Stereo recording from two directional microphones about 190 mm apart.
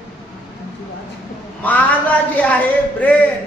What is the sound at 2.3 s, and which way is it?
Speech, 5° left (ahead or behind).